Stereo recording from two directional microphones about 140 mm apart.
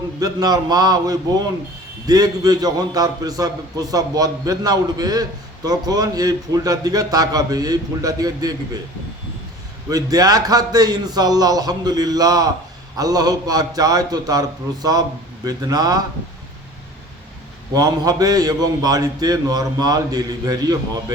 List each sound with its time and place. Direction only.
0.2 s a man's voice: 25° right (ahead or behind)
9.9 s a man's voice: 25° right (ahead or behind)
17.7 s a man's voice: 25° right (ahead or behind)